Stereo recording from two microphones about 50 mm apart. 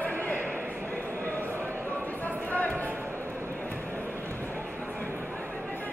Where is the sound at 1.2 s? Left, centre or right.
Left.